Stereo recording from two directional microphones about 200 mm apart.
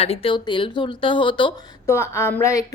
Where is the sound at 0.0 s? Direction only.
30° left (ahead or behind).